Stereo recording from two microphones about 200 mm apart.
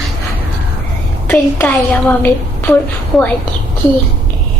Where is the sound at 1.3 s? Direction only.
10° left (ahead or behind).